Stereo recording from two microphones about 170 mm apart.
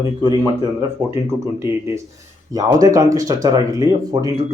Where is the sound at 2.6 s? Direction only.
20° right (ahead or behind).